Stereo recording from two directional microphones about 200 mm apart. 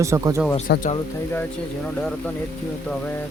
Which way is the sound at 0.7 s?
55° left (ahead or behind).